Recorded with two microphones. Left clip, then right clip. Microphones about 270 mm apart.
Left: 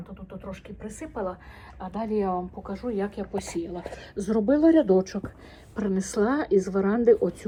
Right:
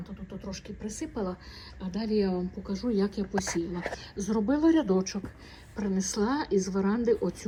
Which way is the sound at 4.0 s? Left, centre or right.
Centre.